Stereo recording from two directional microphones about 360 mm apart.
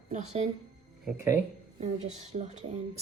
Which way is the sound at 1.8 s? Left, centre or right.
Centre.